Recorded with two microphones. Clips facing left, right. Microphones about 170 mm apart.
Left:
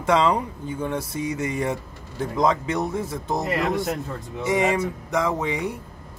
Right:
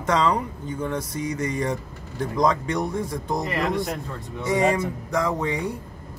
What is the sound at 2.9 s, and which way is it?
Speech, 5° left (ahead or behind).